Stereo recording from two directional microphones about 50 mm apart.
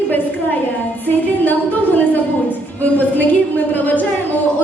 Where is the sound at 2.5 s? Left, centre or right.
Left.